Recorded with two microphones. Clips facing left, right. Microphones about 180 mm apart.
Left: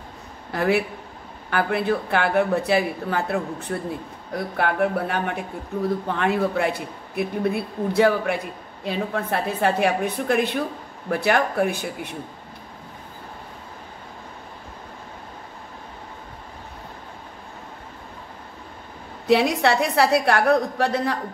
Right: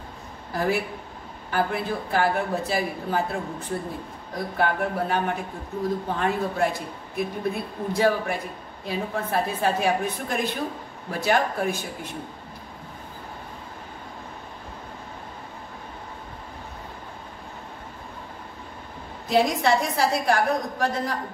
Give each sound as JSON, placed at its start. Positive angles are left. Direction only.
{"t": 0.5, "sound": "a woman's voice", "side_deg": 70}
{"t": 19.2, "sound": "speech", "side_deg": 70}